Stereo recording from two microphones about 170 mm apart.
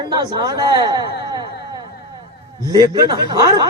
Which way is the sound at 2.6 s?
20° right (ahead or behind).